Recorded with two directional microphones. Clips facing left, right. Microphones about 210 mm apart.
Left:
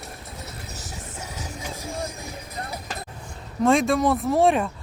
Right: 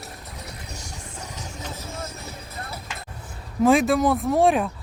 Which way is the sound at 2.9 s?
35° left (ahead or behind).